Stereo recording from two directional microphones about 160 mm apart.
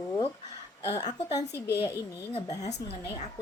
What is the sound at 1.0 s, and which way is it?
Speech, 25° left (ahead or behind).